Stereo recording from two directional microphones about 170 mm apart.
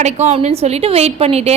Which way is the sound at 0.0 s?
40° right (ahead or behind).